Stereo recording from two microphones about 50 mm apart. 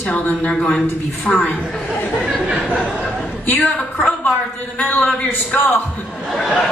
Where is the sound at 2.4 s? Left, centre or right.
Centre.